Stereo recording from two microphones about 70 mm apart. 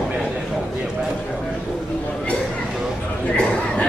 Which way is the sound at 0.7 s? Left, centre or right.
Centre.